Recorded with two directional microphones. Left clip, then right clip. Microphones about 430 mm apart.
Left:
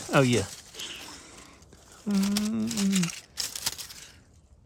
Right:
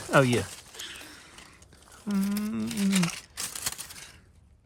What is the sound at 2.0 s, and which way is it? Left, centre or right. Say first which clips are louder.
Speech: left 3 dB; centre.